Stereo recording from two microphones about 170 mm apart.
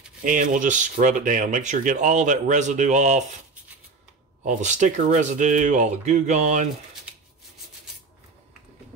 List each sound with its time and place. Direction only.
0.2 s speech: 50° right (ahead or behind)
4.4 s speech: 45° right (ahead or behind)